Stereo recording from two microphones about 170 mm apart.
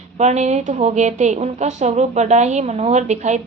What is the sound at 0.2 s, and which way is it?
A woman's voice, 40° right (ahead or behind).